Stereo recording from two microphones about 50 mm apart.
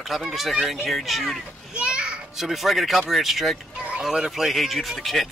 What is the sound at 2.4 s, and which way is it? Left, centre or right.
Speech, centre.